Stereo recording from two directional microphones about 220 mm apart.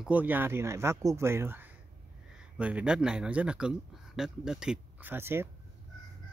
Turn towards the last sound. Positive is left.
turn(degrees=-10)  # may be behind; listen again after turning